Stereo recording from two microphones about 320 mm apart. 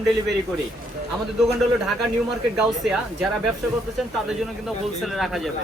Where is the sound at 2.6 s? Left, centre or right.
Centre.